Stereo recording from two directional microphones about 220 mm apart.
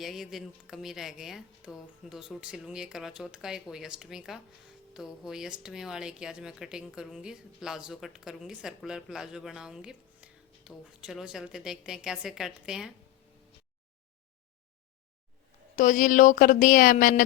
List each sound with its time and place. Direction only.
0.0 s speech: centre (ahead or behind)
15.7 s speech: 35° left (ahead or behind)